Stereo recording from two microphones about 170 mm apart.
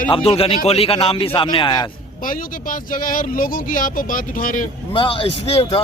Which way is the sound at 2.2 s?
55° left (ahead or behind).